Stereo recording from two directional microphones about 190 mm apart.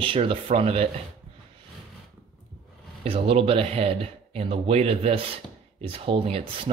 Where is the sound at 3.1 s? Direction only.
30° right (ahead or behind).